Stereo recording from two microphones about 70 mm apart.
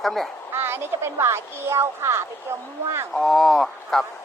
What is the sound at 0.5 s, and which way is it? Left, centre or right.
Speech, right.